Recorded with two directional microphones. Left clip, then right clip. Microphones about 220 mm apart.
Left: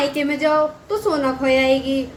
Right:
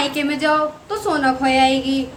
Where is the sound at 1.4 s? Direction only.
15° right (ahead or behind).